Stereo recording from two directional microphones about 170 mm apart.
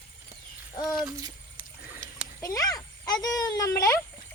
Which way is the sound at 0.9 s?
Centre (ahead or behind).